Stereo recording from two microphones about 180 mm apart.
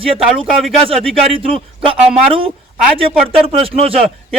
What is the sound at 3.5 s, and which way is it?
Speech, 30° right (ahead or behind).